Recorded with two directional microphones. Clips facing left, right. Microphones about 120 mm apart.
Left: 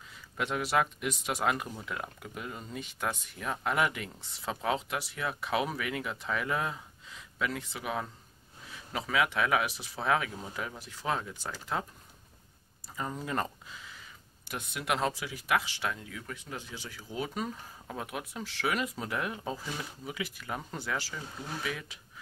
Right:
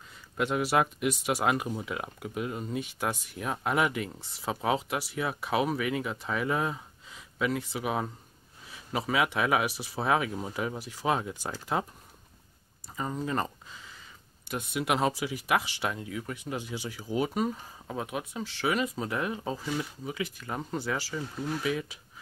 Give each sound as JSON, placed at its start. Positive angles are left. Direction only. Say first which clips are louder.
{"t": 0.4, "sound": "speech", "louder": "right 3 dB", "side_deg": -5}
{"t": 9.1, "sound": "speech", "louder": "right 1 dB", "side_deg": -10}
{"t": 12.9, "sound": "speech", "louder": "right 3 dB", "side_deg": -5}
{"t": 14.5, "sound": "speech", "louder": "right 4 dB", "side_deg": -5}